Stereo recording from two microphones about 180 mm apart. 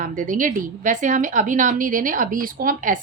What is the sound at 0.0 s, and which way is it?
A woman's voice, 45° right (ahead or behind).